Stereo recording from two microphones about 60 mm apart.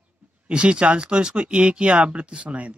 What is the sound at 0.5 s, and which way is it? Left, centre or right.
Speech, centre.